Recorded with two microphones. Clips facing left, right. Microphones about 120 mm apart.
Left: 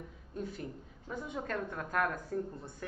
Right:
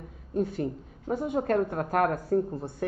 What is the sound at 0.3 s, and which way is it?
Speech, 65° right (ahead or behind).